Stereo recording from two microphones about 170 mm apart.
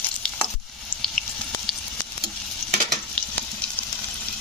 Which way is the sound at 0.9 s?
10° left (ahead or behind).